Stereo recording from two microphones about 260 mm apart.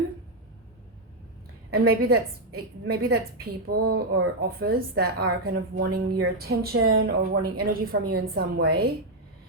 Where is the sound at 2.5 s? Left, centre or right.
Right.